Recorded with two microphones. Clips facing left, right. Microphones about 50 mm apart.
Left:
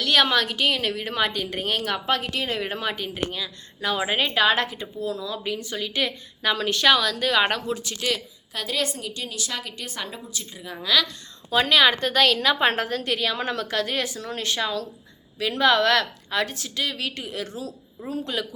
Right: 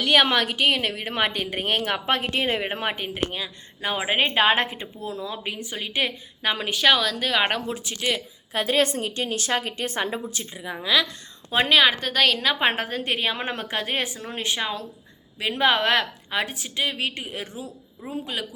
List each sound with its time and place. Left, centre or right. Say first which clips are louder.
0.0 s a woman's voice: right 1 dB; right
8.5 s a woman's voice: right 6 dB; right
10.5 s a woman's voice: even; centre
13.0 s a woman's voice: even; right